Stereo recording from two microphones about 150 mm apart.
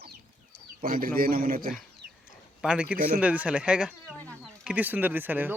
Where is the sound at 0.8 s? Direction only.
75° right (ahead or behind).